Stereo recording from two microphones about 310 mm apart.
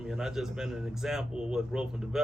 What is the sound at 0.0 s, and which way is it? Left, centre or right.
A man's voice, centre.